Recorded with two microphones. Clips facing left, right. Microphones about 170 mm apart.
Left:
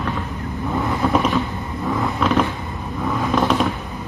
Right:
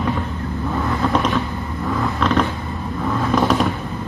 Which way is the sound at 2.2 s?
5° left (ahead or behind).